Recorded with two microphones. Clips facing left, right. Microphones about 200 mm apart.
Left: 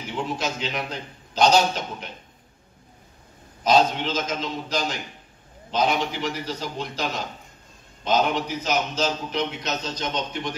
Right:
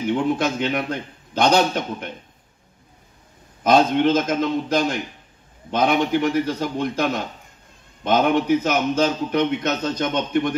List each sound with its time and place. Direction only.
0.2 s a man's voice: 55° right (ahead or behind)
3.6 s a man's voice: 55° right (ahead or behind)